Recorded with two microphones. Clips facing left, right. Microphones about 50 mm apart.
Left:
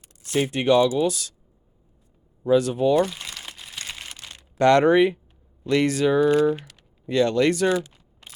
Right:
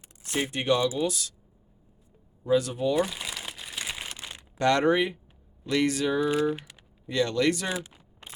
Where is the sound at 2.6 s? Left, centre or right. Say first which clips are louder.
Left 6 dB; left.